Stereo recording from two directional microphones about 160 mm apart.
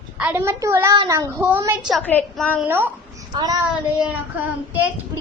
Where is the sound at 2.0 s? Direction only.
10° left (ahead or behind).